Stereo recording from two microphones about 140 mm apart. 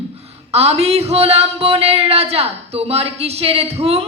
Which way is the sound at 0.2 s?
45° right (ahead or behind).